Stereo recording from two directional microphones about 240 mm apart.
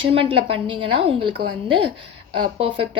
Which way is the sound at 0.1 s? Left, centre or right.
Right.